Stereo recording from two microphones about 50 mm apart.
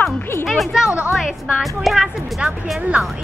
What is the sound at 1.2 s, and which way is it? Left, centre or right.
Speech, centre.